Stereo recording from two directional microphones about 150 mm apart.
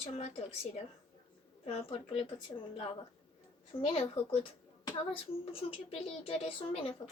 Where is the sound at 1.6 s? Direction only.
40° left (ahead or behind).